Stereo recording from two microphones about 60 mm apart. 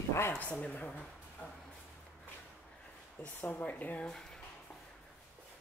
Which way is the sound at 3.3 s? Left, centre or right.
Left.